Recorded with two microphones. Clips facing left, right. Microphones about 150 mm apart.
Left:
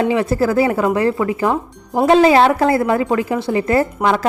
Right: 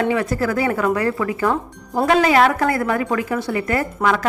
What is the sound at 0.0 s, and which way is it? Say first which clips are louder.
Speech: left 3 dB; 25° left (ahead or behind).